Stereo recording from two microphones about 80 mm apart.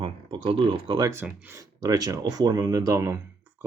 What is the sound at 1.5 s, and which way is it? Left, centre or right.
Speech, right.